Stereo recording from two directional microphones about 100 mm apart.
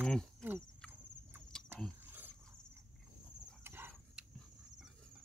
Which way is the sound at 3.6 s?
25° right (ahead or behind).